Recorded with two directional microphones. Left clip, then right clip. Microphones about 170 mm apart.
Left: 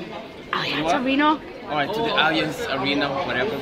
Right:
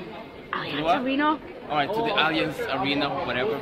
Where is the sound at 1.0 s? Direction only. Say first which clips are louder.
Left 4 dB; 15° left (ahead or behind).